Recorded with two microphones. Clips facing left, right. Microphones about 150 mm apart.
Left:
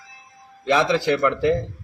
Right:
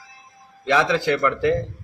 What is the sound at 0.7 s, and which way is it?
Speech, 10° left (ahead or behind).